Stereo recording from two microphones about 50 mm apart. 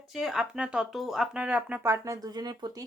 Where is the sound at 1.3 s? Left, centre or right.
Right.